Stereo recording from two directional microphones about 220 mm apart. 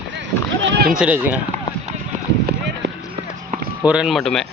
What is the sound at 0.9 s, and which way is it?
Speech, 5° right (ahead or behind).